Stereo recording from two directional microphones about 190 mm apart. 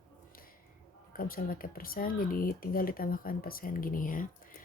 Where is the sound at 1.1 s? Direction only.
50° left (ahead or behind).